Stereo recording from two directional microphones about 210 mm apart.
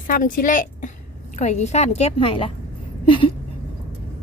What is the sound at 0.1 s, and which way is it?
A woman's voice, 40° left (ahead or behind).